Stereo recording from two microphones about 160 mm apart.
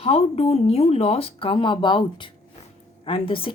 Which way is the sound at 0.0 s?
40° left (ahead or behind).